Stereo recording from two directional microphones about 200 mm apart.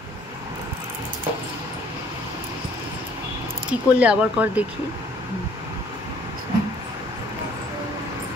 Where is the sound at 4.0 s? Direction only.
5° right (ahead or behind).